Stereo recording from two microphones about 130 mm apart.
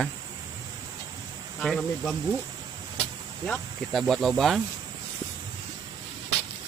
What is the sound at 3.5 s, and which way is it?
Speech, centre (ahead or behind).